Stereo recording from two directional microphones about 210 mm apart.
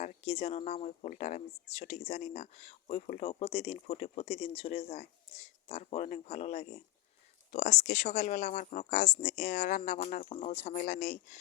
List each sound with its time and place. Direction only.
0.0 s speech: 30° left (ahead or behind)